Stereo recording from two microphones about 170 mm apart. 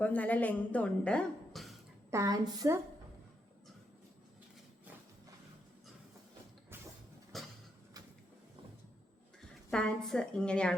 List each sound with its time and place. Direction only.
0.0 s a woman's voice: 10° left (ahead or behind)
2.0 s a woman's voice: 20° right (ahead or behind)
7.3 s a sound: centre (ahead or behind)
9.7 s a woman's voice: 5° left (ahead or behind)